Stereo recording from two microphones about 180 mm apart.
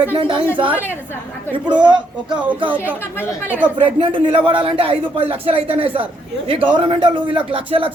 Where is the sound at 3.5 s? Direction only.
10° right (ahead or behind).